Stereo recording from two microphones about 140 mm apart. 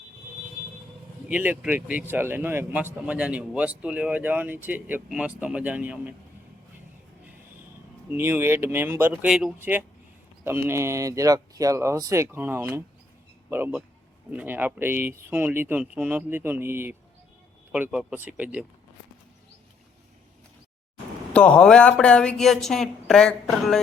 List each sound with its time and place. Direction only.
1.3 s speech: 10° right (ahead or behind)
8.1 s speech: 15° right (ahead or behind)
10.4 s speech: 15° right (ahead or behind)
21.3 s speech: 5° left (ahead or behind)